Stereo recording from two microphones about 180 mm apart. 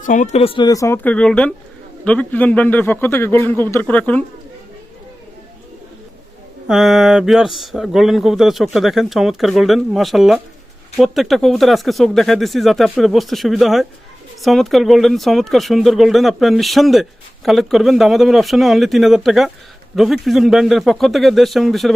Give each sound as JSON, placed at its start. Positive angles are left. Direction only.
{"t": 0.0, "sound": "a man's voice", "side_deg": 45}
{"t": 6.7, "sound": "speech", "side_deg": 0}